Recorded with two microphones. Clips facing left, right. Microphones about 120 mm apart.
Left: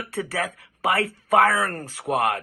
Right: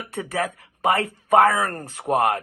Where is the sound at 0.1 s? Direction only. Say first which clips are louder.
Right 2 dB; 20° right (ahead or behind).